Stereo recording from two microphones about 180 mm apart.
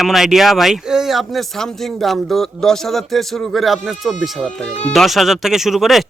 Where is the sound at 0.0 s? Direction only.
Centre (ahead or behind).